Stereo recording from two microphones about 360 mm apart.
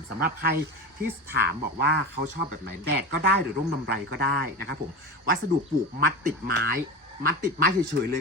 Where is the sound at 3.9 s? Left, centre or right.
Right.